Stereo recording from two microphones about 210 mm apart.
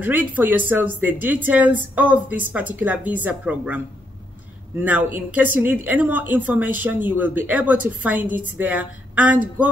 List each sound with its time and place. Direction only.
0.0 s speech: 10° right (ahead or behind)
4.8 s speech: 5° right (ahead or behind)